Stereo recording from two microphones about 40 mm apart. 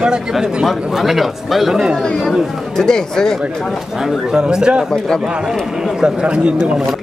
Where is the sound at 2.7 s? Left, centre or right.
Centre.